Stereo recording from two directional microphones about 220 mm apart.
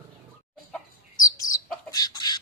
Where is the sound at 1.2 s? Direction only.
15° left (ahead or behind).